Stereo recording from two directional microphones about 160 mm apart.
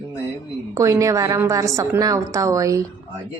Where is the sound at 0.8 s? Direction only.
20° right (ahead or behind).